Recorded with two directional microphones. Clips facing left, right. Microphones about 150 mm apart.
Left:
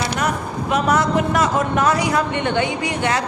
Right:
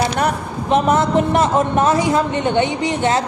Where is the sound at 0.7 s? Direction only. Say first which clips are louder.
Right 3 dB; 25° right (ahead or behind).